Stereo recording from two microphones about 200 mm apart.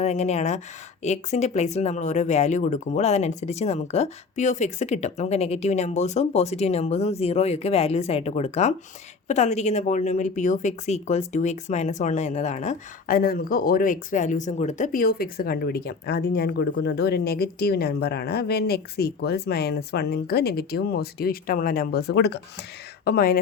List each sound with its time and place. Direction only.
0.0 s speech: 35° left (ahead or behind); by 23.4 s 50° left (ahead or behind)